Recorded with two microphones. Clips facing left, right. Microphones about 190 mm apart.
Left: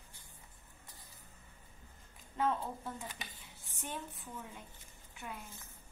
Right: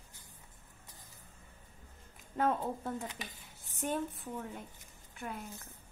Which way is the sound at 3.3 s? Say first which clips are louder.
Right 1 dB; 45° right (ahead or behind).